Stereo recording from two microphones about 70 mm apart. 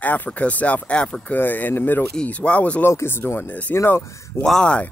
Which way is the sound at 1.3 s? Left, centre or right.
Left.